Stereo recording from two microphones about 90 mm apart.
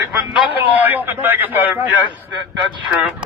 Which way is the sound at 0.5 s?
20° right (ahead or behind).